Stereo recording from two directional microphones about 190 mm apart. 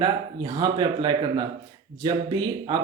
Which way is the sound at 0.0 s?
20° right (ahead or behind).